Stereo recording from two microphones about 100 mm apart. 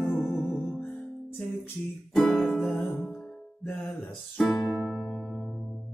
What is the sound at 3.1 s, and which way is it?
Music, centre (ahead or behind).